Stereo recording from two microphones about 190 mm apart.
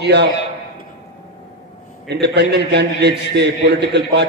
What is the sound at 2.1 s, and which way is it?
A man's voice, 65° right (ahead or behind).